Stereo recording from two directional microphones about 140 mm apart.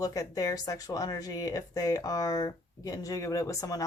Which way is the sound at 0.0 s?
25° left (ahead or behind).